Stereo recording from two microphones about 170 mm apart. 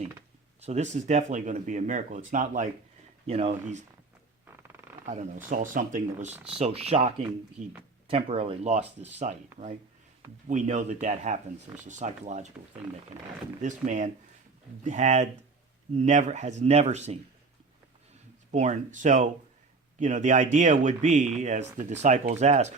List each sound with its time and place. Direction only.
0.6 s speech: 40° right (ahead or behind)
3.2 s speech: 35° right (ahead or behind)
5.0 s speech: 45° right (ahead or behind)
6.6 s speech: 40° right (ahead or behind)
9.2 s speech: 50° right (ahead or behind)
10.5 s speech: 45° right (ahead or behind)
13.6 s speech: 45° right (ahead or behind)
18.5 s speech: 45° right (ahead or behind)